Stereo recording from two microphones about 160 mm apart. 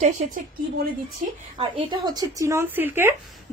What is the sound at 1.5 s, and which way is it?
Speech, 30° right (ahead or behind).